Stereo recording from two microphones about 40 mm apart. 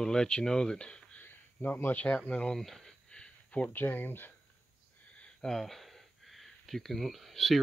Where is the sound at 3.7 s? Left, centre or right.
Left.